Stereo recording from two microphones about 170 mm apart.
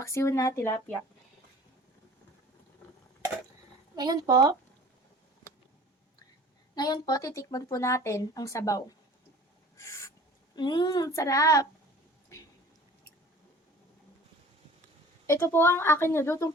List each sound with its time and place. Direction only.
0.0 s a woman's voice: 15° left (ahead or behind)
3.9 s a woman's voice: 25° right (ahead or behind)
6.7 s speech: 25° left (ahead or behind)
9.7 s owl: 15° left (ahead or behind)
10.5 s speech: 25° left (ahead or behind)
15.3 s a woman's voice: 15° left (ahead or behind)